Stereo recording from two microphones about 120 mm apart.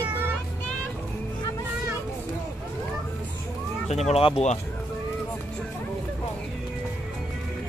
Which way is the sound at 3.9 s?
65° left (ahead or behind).